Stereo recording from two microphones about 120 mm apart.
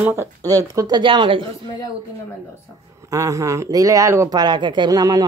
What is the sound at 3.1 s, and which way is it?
Speech, 25° right (ahead or behind).